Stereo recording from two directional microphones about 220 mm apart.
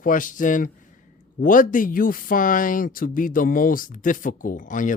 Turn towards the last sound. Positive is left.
turn(degrees=35)  # may be behind; listen again after turning